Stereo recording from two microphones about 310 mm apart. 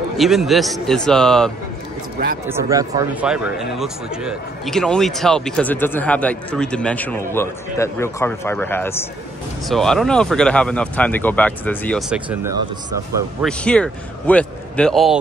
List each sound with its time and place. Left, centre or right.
0.2 s speech: centre
2.4 s speech: centre